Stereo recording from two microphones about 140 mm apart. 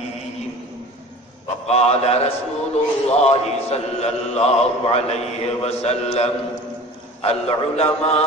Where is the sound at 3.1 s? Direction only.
50° left (ahead or behind).